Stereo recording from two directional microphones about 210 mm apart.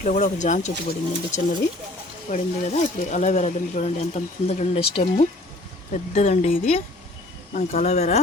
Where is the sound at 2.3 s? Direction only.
35° left (ahead or behind).